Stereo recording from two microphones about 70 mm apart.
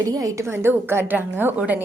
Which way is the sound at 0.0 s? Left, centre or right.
Right.